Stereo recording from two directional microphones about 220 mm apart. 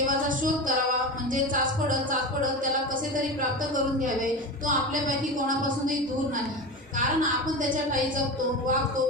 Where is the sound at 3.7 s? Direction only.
35° right (ahead or behind).